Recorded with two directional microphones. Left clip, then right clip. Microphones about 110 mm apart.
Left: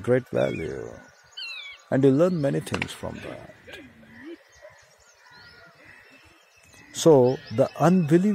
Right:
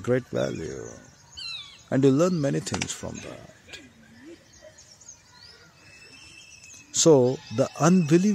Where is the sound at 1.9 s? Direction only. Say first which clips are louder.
Left 1 dB; 35° right (ahead or behind).